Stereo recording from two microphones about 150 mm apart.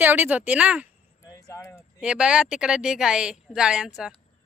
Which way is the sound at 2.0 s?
5° right (ahead or behind).